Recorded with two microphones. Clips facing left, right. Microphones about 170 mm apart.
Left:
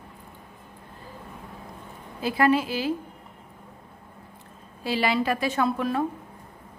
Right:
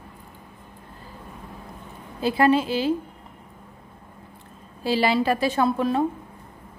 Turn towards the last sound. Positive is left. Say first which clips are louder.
# right 3 dB
turn(degrees=-30)  # may be behind; listen again after turning